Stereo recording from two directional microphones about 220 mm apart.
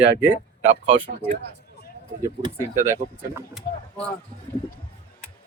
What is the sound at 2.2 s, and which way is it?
Speech, 15° right (ahead or behind).